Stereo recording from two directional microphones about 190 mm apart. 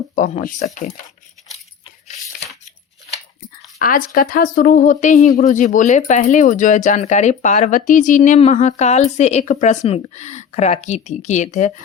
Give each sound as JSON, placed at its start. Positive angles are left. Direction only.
{"t": 0.2, "sound": "speech", "side_deg": 40}
{"t": 3.8, "sound": "speech", "side_deg": 45}